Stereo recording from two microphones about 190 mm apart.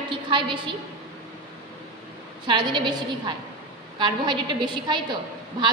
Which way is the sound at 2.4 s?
25° right (ahead or behind).